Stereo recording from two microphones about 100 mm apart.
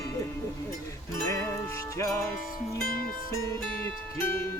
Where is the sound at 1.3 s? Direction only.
30° left (ahead or behind).